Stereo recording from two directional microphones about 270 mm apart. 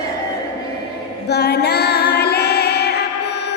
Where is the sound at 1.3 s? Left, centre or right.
Left.